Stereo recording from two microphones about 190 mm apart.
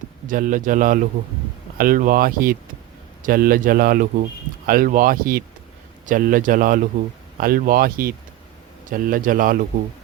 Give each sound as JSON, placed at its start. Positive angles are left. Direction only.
{"t": 0.3, "sound": "speech", "side_deg": -45}